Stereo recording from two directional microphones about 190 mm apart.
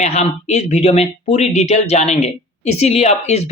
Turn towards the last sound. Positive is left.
turn(degrees=35)  # may be behind; listen again after turning